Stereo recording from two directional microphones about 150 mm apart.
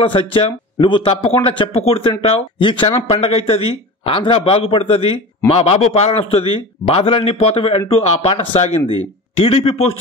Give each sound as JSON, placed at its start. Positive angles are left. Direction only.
{"t": 0.0, "sound": "speech", "side_deg": 35}